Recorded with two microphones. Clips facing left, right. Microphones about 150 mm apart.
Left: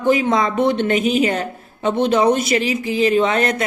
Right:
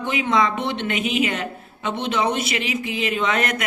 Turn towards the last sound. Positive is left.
turn(degrees=30)  # may be behind; listen again after turning